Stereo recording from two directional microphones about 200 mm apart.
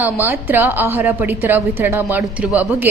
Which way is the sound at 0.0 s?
10° right (ahead or behind).